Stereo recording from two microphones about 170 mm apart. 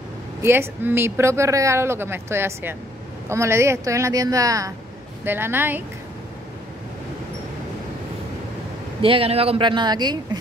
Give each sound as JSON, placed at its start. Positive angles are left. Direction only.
{"t": 0.4, "sound": "speech", "side_deg": -15}
{"t": 9.0, "sound": "speech", "side_deg": -35}